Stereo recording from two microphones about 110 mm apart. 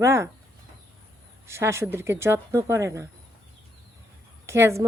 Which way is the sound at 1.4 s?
25° right (ahead or behind).